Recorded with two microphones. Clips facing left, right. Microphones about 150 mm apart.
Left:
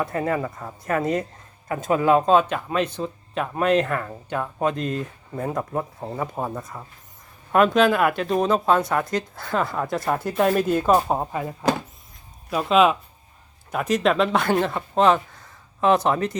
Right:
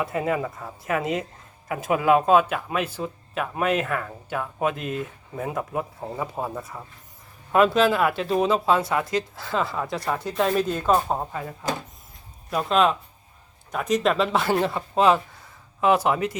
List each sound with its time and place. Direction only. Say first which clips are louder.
0.0 s speech: left 1 dB; 5° right (ahead or behind); by 11.5 s 15° left (ahead or behind)
12.5 s speech: left 3 dB; centre (ahead or behind)